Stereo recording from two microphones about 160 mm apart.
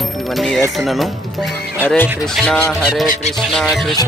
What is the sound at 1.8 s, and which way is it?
Speech, 10° left (ahead or behind).